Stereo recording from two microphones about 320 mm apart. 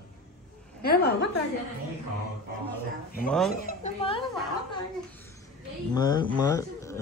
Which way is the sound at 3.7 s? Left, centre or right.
Centre.